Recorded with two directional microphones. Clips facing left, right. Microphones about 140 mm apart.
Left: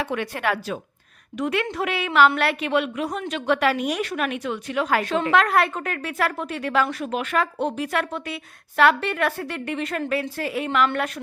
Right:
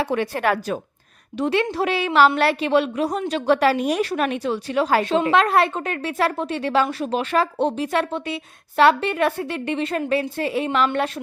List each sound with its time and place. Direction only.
0.0 s a woman's voice: 35° right (ahead or behind)
1.4 s a woman's voice: 30° right (ahead or behind)